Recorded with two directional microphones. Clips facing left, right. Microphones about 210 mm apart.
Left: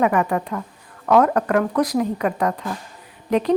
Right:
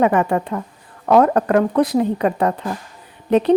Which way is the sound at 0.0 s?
30° right (ahead or behind).